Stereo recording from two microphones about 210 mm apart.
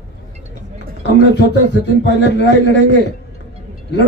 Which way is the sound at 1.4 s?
60° left (ahead or behind).